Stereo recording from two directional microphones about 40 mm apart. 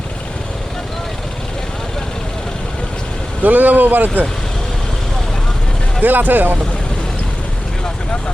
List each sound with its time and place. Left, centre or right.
3.4 s speech: right
6.0 s speech: right